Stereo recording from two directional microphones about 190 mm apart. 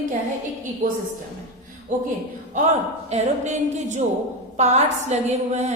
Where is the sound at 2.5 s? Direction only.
40° right (ahead or behind).